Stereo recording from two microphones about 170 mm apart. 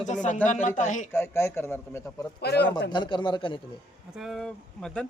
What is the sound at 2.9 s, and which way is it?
Speech, 25° left (ahead or behind).